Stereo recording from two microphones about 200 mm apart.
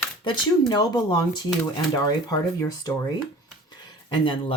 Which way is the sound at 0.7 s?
20° left (ahead or behind).